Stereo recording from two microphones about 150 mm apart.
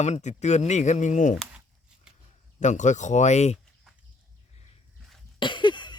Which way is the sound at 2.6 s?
55° left (ahead or behind).